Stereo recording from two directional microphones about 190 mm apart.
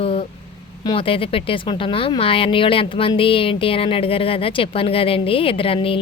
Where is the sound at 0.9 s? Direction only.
30° left (ahead or behind).